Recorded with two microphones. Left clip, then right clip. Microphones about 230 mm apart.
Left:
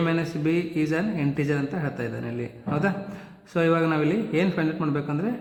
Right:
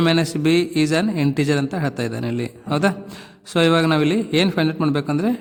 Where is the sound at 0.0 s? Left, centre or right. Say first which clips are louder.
Right 7 dB; right.